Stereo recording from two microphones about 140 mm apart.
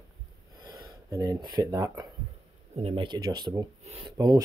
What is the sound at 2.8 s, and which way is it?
Speech, 35° right (ahead or behind).